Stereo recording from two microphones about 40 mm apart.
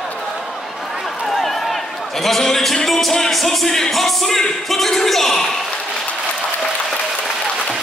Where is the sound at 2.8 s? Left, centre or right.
Centre.